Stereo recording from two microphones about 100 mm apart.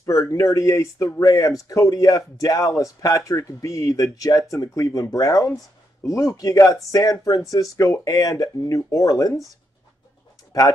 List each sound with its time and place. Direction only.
0.0 s speech: 30° left (ahead or behind)